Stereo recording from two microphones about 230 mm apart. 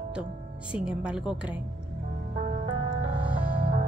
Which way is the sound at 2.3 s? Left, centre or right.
Right.